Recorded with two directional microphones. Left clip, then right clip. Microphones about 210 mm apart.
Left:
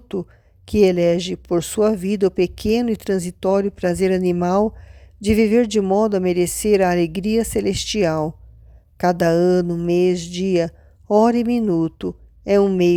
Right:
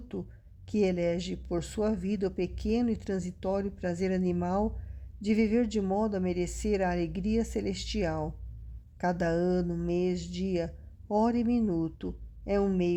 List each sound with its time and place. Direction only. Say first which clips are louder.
0.1 s speech: left 14 dB; 30° left (ahead or behind)